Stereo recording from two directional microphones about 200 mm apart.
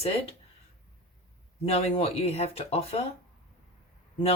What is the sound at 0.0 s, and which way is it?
Speech, 30° left (ahead or behind).